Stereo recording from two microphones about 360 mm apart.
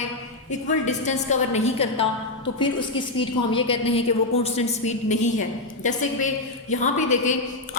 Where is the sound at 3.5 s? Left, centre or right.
Centre.